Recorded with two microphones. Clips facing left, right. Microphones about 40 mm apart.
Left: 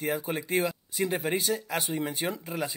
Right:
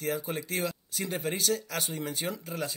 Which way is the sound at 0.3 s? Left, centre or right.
Left.